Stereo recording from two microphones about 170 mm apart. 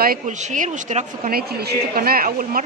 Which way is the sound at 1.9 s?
60° right (ahead or behind).